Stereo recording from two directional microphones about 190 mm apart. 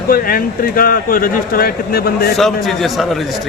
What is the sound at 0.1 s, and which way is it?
Speech, 50° left (ahead or behind).